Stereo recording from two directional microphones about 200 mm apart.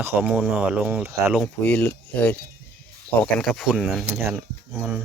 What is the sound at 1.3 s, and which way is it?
Speech, 5° left (ahead or behind).